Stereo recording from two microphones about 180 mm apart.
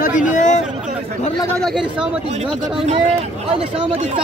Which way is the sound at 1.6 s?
5° right (ahead or behind).